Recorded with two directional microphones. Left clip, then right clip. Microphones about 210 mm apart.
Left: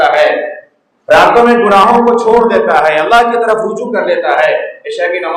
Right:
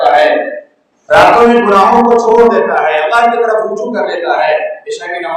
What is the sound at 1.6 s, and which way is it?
A man's voice, 50° left (ahead or behind).